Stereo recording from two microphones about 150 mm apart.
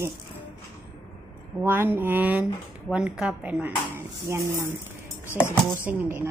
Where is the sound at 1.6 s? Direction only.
15° right (ahead or behind).